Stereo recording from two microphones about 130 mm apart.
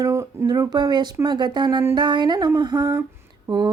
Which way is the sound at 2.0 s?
35° right (ahead or behind).